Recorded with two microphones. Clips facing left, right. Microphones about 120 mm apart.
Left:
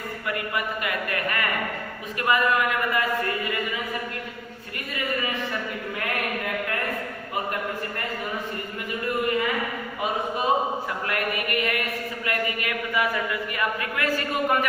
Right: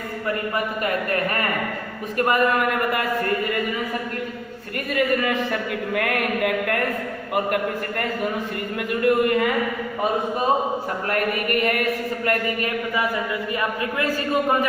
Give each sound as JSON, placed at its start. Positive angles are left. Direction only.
{"t": 0.5, "sound": "speech", "side_deg": -40}
{"t": 4.9, "sound": "speech", "side_deg": -60}
{"t": 8.9, "sound": "speech", "side_deg": -60}
{"t": 11.1, "sound": "speech", "side_deg": -45}